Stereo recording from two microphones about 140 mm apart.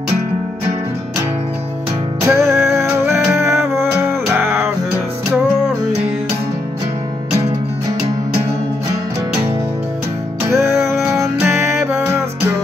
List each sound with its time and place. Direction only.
2.2 s music: 20° right (ahead or behind)
3.3 s music: 5° right (ahead or behind)
4.3 s music: 15° right (ahead or behind)
10.4 s music: 20° right (ahead or behind)
10.9 s music: 5° right (ahead or behind)
11.1 s music: 20° right (ahead or behind)